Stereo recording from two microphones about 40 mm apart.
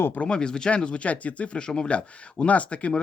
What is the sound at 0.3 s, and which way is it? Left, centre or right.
Speech, left.